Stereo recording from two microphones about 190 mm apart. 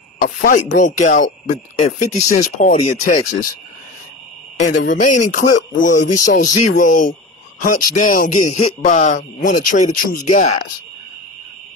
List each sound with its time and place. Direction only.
0.2 s speech: 50° left (ahead or behind)
4.8 s speech: 40° left (ahead or behind)